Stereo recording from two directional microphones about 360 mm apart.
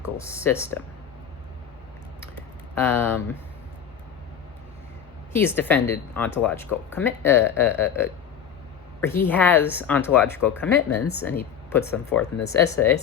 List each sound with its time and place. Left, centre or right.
0.3 s speech: centre
2.7 s speech: centre
5.3 s speech: centre
10.8 s a woman's voice: left
11.3 s speech: centre